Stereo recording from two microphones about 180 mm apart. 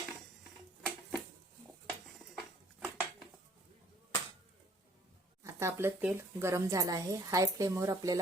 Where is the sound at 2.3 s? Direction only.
5° right (ahead or behind).